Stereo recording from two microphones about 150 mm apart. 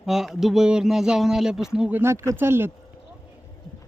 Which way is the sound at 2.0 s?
15° right (ahead or behind).